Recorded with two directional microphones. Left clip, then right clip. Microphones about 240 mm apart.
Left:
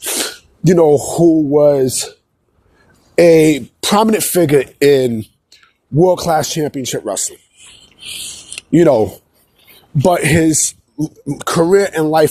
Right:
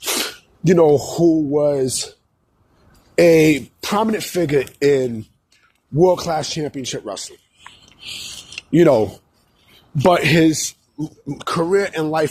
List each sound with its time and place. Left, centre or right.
0.0 s sneeze: centre
0.3 s speech: left
3.2 s speech: left
7.9 s a sound: left
9.6 s speech: left